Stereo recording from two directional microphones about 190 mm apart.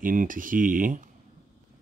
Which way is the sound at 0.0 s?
45° right (ahead or behind).